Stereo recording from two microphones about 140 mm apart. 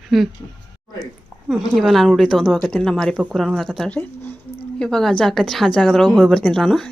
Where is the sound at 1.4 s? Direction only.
Centre (ahead or behind).